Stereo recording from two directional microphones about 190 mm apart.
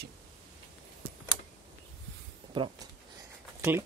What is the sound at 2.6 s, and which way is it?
Speech, 25° right (ahead or behind).